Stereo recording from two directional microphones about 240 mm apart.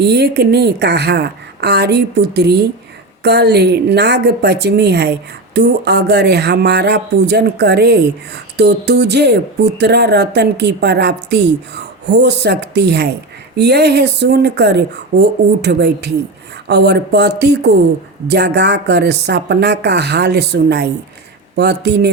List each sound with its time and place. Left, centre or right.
0.0 s speech: right